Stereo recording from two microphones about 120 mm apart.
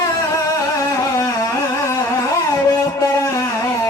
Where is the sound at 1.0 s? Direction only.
30° left (ahead or behind).